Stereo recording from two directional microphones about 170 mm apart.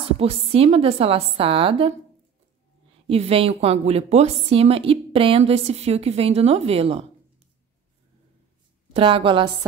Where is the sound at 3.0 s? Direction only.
35° right (ahead or behind).